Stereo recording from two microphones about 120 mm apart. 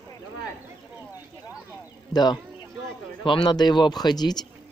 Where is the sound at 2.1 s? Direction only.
35° left (ahead or behind).